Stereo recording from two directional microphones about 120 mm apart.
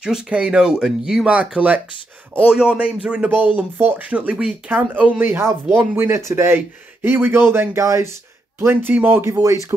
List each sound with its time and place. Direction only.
0.0 s speech: 10° right (ahead or behind); by 9.8 s 25° right (ahead or behind)